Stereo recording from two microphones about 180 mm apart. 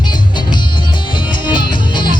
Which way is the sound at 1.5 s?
25° left (ahead or behind).